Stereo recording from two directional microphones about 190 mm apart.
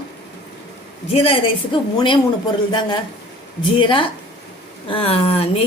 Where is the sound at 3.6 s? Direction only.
25° left (ahead or behind).